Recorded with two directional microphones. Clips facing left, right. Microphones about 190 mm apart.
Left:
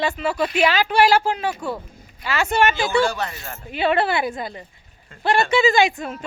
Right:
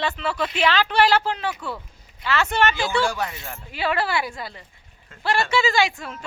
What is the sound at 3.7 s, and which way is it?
Speech, 25° left (ahead or behind).